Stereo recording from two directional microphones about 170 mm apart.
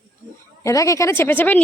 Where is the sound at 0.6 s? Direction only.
20° left (ahead or behind).